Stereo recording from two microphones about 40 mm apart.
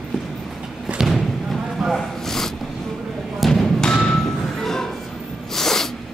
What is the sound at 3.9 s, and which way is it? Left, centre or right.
Music, left.